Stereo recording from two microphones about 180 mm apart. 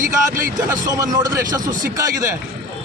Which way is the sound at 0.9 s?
20° right (ahead or behind).